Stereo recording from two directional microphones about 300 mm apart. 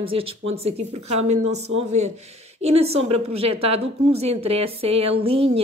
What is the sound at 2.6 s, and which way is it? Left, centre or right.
Speech, centre.